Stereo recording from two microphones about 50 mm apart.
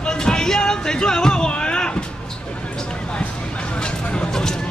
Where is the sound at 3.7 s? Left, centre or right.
Left.